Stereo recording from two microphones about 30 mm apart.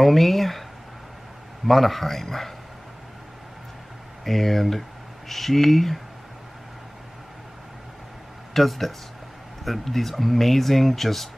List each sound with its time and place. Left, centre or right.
0.0 s speech: centre
1.7 s a man's voice: centre
4.2 s a man's voice: centre
8.5 s speech: centre